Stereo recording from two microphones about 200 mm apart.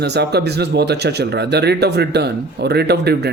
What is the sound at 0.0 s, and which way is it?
Speech, 55° right (ahead or behind).